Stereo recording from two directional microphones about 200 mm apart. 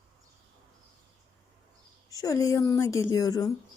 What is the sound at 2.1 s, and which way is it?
A woman's voice, 15° left (ahead or behind).